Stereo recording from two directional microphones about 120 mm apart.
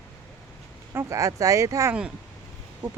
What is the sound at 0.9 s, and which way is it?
Speech, 25° right (ahead or behind).